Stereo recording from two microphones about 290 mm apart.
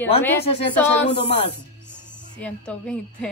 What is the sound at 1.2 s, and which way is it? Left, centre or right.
Speech, left.